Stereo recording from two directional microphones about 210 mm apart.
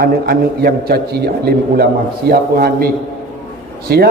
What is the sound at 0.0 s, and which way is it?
A man's voice, 45° right (ahead or behind).